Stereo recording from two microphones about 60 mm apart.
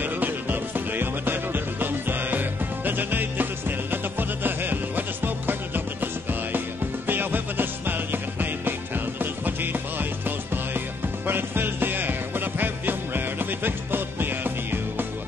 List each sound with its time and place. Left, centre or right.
0.0 s music: right